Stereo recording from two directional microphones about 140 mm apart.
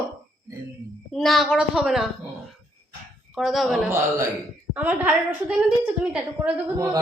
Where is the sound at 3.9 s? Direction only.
20° right (ahead or behind).